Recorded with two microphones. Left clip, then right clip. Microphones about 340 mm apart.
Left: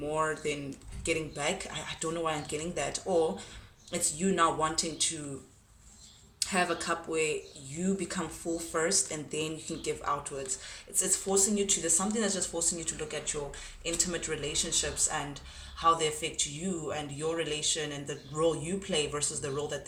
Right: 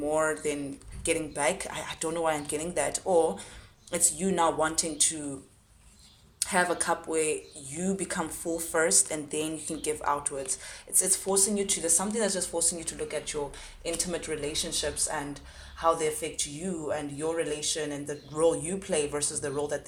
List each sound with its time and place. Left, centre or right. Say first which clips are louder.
0.1 s speech: right 3 dB; centre
6.4 s speech: right 3 dB; centre